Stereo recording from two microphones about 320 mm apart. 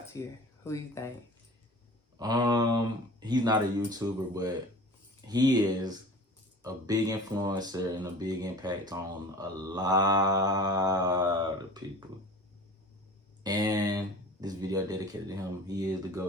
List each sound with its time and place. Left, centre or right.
0.1 s speech: centre
2.1 s mantra: centre
13.4 s mantra: centre